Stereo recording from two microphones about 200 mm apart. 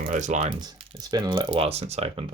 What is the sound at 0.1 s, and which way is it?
Speech, 35° right (ahead or behind).